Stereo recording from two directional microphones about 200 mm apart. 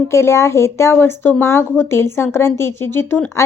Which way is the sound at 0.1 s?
15° left (ahead or behind).